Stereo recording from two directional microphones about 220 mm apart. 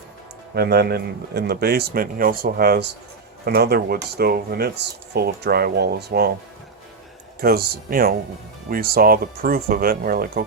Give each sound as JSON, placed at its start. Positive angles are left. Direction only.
{"t": 0.5, "sound": "speech", "side_deg": -45}
{"t": 7.4, "sound": "speech", "side_deg": -45}